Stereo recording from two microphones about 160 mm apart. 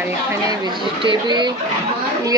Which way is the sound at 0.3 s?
25° right (ahead or behind).